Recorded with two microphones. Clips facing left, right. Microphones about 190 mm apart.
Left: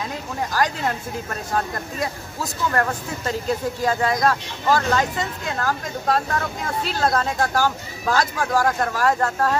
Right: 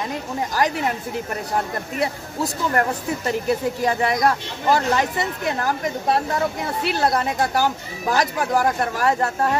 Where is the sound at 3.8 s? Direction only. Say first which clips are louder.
Even; 20° right (ahead or behind).